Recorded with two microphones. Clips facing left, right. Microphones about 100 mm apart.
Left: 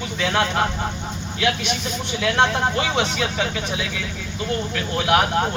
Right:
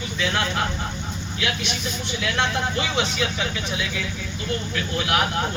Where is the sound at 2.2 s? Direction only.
35° left (ahead or behind).